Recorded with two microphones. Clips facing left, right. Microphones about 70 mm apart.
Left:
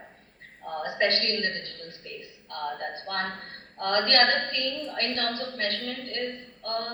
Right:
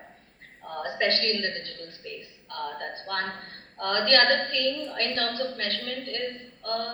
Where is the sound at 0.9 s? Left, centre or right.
Left.